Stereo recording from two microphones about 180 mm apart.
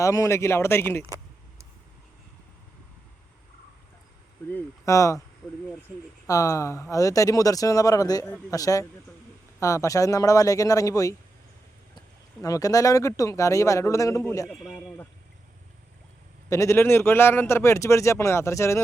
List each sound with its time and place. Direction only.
0.0 s speech: 15° left (ahead or behind)
4.5 s speech: 15° left (ahead or behind)
6.2 s a man's voice: 15° left (ahead or behind)
16.5 s speech: 15° left (ahead or behind)